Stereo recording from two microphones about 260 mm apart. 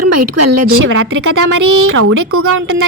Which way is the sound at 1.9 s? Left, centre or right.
Right.